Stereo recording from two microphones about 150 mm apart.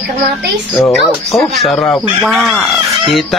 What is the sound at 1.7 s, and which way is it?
Speech, 15° left (ahead or behind).